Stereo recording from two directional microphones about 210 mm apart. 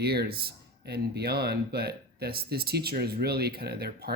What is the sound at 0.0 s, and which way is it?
Speech, 50° right (ahead or behind).